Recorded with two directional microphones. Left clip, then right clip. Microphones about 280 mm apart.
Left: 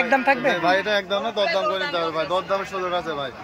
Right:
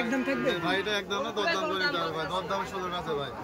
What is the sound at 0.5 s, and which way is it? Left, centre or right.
Speech, centre.